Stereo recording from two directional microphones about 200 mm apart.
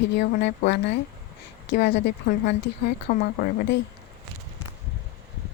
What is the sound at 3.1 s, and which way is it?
Speech, 45° left (ahead or behind).